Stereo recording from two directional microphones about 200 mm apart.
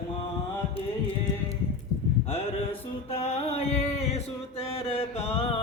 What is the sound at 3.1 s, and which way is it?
Mantra, 30° left (ahead or behind).